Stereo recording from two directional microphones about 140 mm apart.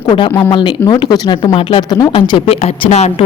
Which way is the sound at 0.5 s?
35° left (ahead or behind).